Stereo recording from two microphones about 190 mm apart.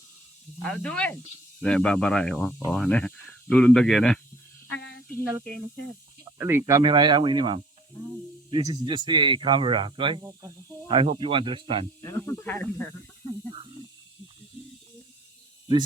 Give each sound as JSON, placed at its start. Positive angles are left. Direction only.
{"t": 0.6, "sound": "speech", "side_deg": 5}
{"t": 4.7, "sound": "a sound", "side_deg": 75}
{"t": 6.4, "sound": "speech", "side_deg": -15}
{"t": 12.0, "sound": "speech", "side_deg": 15}